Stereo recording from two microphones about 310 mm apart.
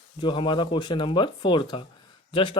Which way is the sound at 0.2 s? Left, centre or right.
Centre.